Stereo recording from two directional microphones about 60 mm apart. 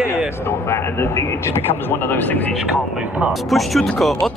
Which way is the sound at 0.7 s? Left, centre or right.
Left.